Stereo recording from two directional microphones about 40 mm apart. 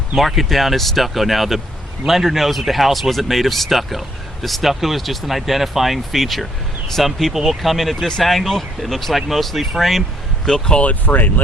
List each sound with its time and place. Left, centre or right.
0.2 s speech: centre
10.4 s speech: centre
11.0 s speech: left